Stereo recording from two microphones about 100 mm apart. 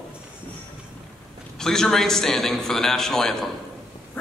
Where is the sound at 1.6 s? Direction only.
5° left (ahead or behind).